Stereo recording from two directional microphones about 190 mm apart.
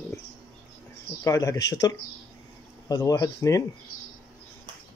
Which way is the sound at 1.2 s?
15° left (ahead or behind).